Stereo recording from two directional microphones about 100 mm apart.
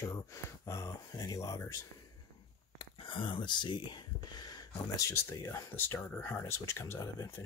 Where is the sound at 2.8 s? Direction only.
60° left (ahead or behind); by 5.0 s 45° left (ahead or behind).